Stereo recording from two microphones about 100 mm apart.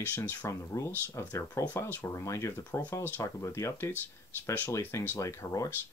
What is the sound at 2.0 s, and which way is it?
Speech, 30° left (ahead or behind).